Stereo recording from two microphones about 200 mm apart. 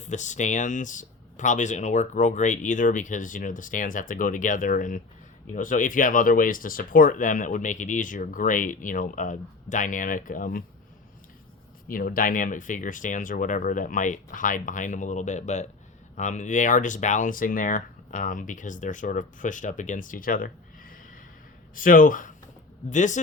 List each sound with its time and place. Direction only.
0.0 s speech: 35° left (ahead or behind)
11.9 s speech: 45° left (ahead or behind)